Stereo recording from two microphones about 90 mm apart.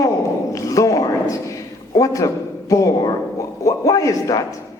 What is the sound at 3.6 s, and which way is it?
Speech, 40° left (ahead or behind).